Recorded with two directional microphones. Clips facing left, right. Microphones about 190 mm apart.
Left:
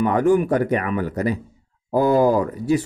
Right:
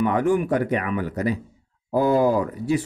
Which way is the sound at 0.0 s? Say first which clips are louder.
Left 3 dB; 40° left (ahead or behind).